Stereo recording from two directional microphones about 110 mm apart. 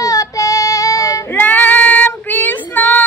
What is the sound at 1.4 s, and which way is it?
Child singing, 15° left (ahead or behind).